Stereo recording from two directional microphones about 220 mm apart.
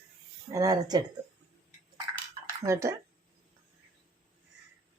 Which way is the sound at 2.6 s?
15° right (ahead or behind).